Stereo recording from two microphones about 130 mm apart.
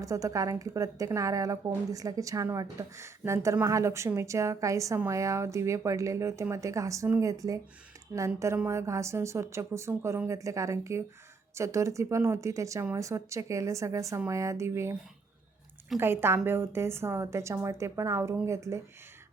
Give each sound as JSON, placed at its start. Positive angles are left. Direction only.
{"t": 0.0, "sound": "a woman's voice", "side_deg": -25}
{"t": 16.0, "sound": "a woman's voice", "side_deg": -20}